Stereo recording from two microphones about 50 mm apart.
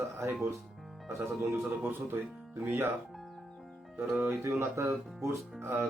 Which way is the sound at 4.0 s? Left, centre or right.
Right.